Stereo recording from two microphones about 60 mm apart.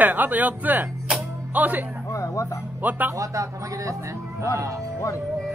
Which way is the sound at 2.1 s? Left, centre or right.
Left.